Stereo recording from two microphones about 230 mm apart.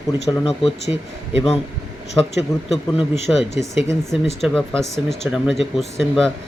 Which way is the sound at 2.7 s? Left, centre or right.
Left.